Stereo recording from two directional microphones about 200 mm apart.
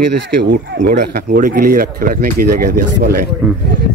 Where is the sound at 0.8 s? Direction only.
40° right (ahead or behind).